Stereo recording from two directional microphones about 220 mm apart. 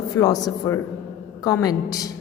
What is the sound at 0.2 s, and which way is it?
A woman's voice, 15° left (ahead or behind).